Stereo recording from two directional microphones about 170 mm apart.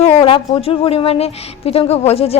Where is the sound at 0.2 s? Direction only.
30° left (ahead or behind).